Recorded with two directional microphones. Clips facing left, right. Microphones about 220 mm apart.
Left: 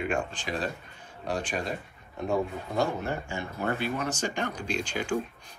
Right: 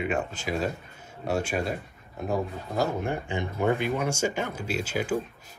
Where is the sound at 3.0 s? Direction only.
15° right (ahead or behind).